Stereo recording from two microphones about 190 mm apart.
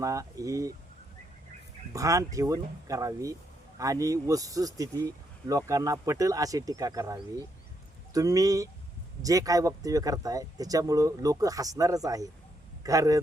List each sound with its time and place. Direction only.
0.0 s speech: 15° right (ahead or behind)
1.9 s speech: 15° right (ahead or behind)